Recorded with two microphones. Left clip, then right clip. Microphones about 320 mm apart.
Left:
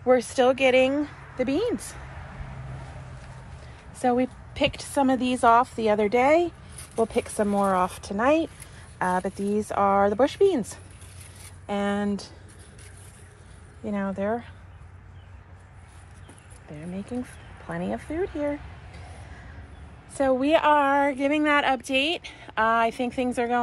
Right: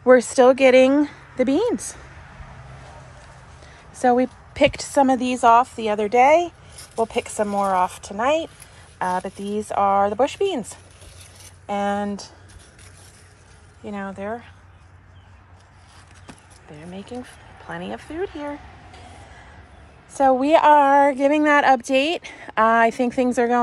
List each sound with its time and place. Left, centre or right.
0.0 s speech: right
4.0 s a woman's voice: centre
13.8 s speech: centre
17.6 s speech: centre
20.2 s a woman's voice: centre